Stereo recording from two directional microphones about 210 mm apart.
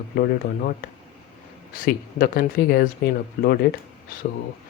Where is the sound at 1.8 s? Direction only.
45° left (ahead or behind).